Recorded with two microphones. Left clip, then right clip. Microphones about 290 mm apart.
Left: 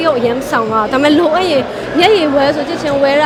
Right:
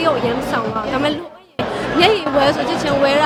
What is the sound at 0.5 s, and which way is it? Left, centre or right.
A woman's voice, left.